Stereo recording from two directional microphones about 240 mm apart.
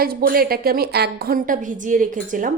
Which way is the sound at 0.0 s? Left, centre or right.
Right.